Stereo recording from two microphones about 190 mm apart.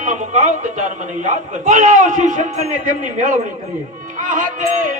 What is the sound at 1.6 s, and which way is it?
Speech, 40° right (ahead or behind).